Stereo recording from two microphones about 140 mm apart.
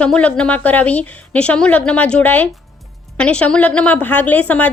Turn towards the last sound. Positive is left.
turn(degrees=10)  # may be behind; listen again after turning